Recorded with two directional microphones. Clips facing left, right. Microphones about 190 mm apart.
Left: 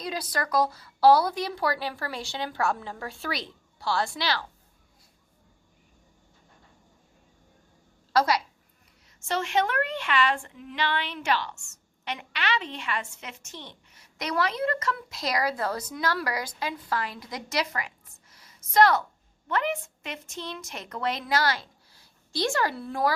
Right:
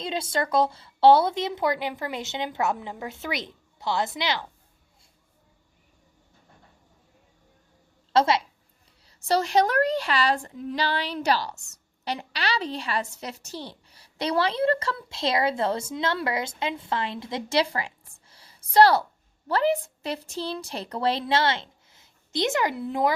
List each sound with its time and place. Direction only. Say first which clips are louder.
0.0 s speech: right 4 dB; 25° right (ahead or behind)
8.1 s speech: right 2 dB; 25° right (ahead or behind)
9.0 s a woman's voice: right 6 dB; 35° right (ahead or behind); by 23.1 s 20° right (ahead or behind)